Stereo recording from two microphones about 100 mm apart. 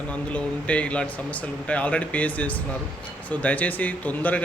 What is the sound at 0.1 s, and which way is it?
Speech, 15° left (ahead or behind).